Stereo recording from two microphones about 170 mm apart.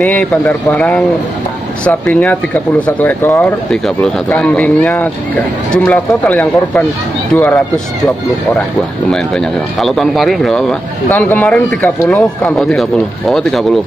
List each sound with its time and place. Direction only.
0.0 s speech: 10° left (ahead or behind)
9.1 s speech: 5° left (ahead or behind)